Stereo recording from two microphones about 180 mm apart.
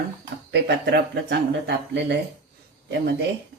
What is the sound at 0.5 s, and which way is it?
Speech, 70° right (ahead or behind).